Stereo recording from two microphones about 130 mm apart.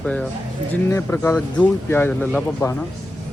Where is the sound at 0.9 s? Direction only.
20° left (ahead or behind).